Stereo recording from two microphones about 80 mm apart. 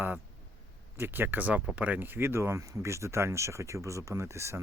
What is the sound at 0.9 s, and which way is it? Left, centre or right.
Speech, right.